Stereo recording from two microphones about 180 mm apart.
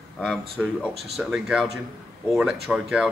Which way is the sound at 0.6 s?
Centre (ahead or behind).